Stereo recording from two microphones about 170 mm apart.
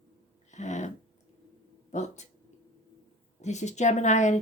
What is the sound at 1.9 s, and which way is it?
Speech, 45° left (ahead or behind).